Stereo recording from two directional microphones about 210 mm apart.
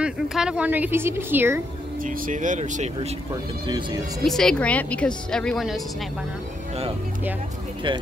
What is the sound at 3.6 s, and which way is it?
Speech, 20° right (ahead or behind).